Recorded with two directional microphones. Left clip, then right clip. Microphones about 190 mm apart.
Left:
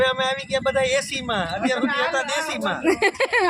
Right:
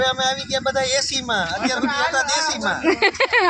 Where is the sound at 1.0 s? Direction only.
45° left (ahead or behind).